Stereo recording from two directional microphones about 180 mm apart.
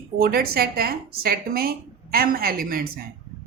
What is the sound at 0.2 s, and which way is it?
A woman's voice, 55° right (ahead or behind).